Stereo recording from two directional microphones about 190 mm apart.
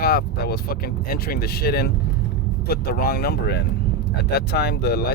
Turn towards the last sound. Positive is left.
turn(degrees=60)  # may be behind; listen again after turning